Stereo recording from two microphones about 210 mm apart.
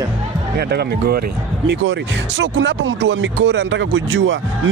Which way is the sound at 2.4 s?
55° right (ahead or behind).